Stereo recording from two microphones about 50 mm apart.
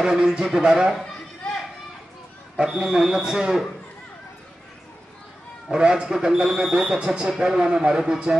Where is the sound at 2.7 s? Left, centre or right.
Centre.